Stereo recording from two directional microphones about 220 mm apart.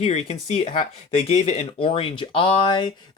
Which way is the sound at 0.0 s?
30° left (ahead or behind).